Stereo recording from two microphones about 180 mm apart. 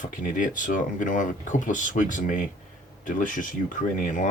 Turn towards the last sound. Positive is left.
turn(degrees=45)  # may be behind; listen again after turning